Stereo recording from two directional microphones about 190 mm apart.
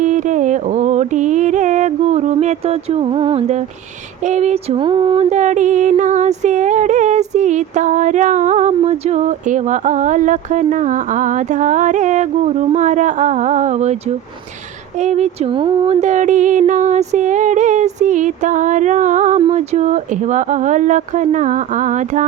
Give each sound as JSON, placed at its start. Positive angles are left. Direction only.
{"t": 0.0, "sound": "music", "side_deg": -40}
{"t": 15.0, "sound": "music", "side_deg": -35}